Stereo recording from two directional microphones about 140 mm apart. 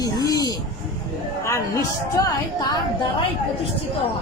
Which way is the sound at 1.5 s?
20° left (ahead or behind).